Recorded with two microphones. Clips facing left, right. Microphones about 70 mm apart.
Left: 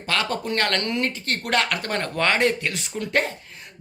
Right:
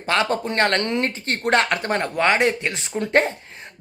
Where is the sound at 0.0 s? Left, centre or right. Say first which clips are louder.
Right 4 dB; right.